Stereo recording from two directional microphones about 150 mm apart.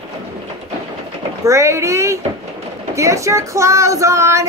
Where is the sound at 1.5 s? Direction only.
20° right (ahead or behind).